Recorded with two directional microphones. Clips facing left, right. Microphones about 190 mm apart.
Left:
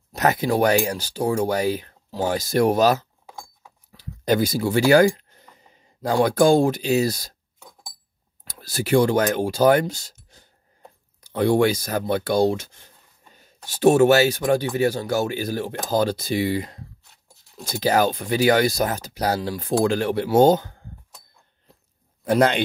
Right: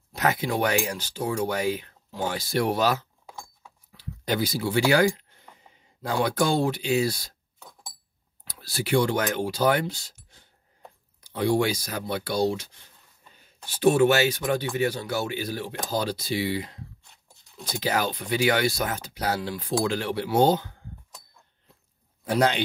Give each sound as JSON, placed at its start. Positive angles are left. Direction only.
{"t": 0.1, "sound": "speech", "side_deg": 40}
{"t": 8.5, "sound": "speech", "side_deg": 45}
{"t": 11.2, "sound": "speech", "side_deg": 55}
{"t": 22.2, "sound": "speech", "side_deg": 55}